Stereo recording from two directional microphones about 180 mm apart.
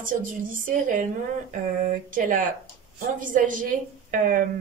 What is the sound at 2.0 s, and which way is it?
A woman's voice, 50° right (ahead or behind).